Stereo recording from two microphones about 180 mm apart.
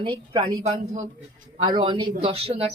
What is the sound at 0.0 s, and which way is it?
A woman's voice, 25° right (ahead or behind).